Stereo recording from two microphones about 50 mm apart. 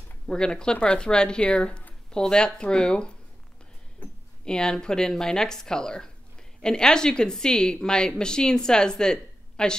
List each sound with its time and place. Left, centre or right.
0.3 s a woman's voice: centre
4.5 s a woman's voice: centre